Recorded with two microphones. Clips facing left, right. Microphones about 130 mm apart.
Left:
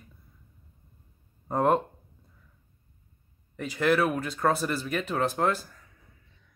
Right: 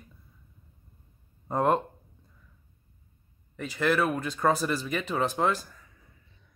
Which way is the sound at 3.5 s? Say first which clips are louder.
Left 2 dB; 10° left (ahead or behind).